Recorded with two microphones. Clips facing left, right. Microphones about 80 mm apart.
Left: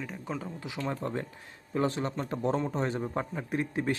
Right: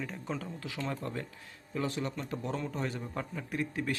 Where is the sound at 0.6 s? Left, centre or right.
Centre.